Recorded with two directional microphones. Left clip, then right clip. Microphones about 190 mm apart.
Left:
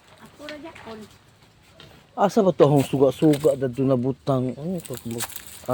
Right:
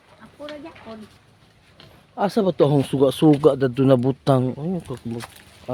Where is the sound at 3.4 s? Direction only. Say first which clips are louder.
Right 4 dB; 40° right (ahead or behind).